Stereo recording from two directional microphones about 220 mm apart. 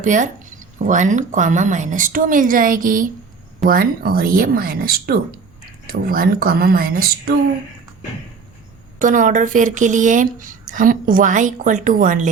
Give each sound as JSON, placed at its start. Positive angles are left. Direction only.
{"t": 0.0, "sound": "speech", "side_deg": -35}
{"t": 9.0, "sound": "speech", "side_deg": -35}